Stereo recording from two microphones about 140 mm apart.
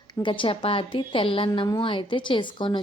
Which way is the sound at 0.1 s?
35° left (ahead or behind).